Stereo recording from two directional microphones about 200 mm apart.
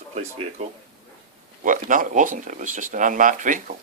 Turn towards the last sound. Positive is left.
turn(degrees=-40)  # may be behind; listen again after turning